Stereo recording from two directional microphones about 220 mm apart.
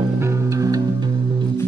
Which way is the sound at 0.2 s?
15° right (ahead or behind).